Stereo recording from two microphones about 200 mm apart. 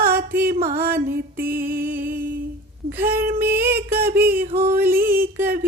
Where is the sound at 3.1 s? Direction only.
50° right (ahead or behind).